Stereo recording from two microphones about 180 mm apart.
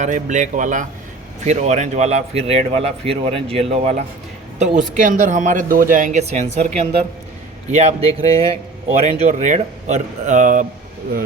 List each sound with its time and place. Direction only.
0.0 s speech: 45° right (ahead or behind)